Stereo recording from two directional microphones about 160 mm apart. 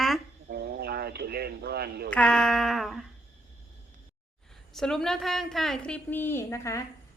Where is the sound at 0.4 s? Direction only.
85° right.